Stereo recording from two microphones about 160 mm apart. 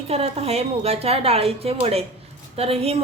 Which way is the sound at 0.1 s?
40° right (ahead or behind).